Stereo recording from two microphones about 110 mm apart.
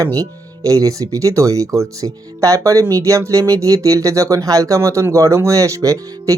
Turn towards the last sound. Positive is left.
turn(degrees=-30)  # may be behind; listen again after turning